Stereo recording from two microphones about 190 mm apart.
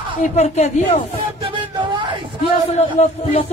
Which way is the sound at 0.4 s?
35° left (ahead or behind).